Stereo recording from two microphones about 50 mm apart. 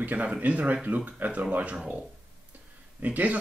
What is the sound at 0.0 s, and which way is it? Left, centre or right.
Speech, right.